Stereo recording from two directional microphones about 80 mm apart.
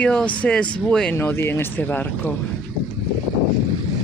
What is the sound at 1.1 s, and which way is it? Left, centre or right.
Speech, left.